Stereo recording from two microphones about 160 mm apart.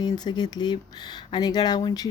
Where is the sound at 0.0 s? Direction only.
25° left (ahead or behind).